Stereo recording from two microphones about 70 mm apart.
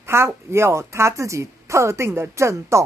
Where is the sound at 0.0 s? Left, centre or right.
Right.